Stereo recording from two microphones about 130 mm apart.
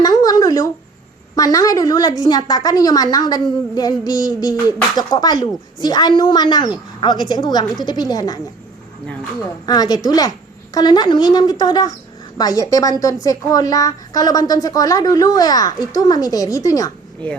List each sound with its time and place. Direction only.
0.0 s a sound: 30° left (ahead or behind)
1.4 s a woman's voice: 30° left (ahead or behind)
9.6 s a woman's voice: 30° left (ahead or behind)